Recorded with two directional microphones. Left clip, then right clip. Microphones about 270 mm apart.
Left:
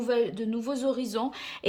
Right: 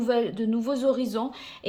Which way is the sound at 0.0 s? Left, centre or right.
Centre.